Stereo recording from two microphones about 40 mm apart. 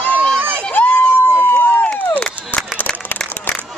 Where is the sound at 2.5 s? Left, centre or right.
Left.